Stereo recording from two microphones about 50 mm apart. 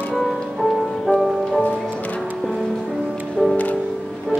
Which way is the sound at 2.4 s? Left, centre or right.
Centre.